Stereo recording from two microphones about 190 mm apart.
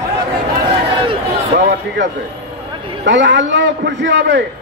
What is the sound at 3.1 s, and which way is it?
A man's voice, 70° right (ahead or behind).